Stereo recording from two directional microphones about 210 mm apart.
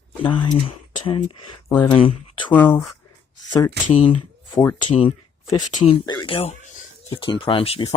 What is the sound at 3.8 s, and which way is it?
Speech, 30° left (ahead or behind).